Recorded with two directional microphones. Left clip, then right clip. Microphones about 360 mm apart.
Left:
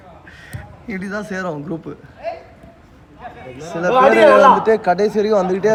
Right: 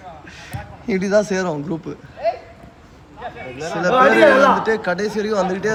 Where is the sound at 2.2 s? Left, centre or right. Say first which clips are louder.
Right 6 dB; right.